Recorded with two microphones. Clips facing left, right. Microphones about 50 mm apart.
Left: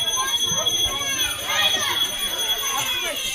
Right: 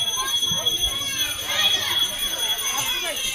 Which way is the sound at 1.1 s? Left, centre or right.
Centre.